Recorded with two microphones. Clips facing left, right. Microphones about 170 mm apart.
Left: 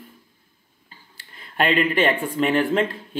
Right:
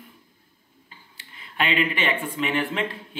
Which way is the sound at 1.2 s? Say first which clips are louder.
Left 5 dB; 45° left (ahead or behind).